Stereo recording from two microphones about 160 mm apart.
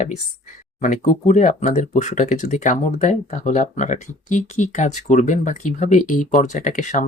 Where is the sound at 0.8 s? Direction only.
50° left (ahead or behind).